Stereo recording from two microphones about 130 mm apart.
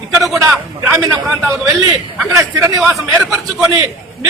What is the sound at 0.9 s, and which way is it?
Speech, 25° right (ahead or behind).